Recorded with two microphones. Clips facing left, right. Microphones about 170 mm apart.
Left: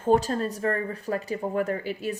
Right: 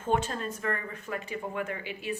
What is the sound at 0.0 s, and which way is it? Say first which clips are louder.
Speech: left 7 dB; 35° left (ahead or behind).